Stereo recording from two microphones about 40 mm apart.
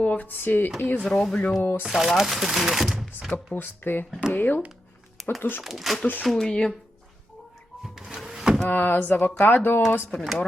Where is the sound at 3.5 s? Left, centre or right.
Left.